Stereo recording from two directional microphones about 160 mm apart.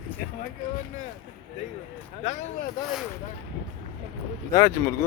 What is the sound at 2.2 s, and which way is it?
Speech, 45° left (ahead or behind).